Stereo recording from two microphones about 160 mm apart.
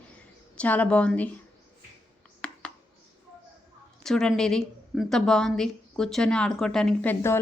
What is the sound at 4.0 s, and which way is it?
A woman's voice, 5° left (ahead or behind).